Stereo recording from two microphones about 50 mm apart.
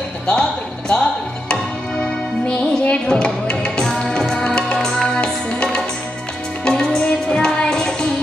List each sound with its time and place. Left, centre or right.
0.3 s basketball bounce: centre
2.8 s music: left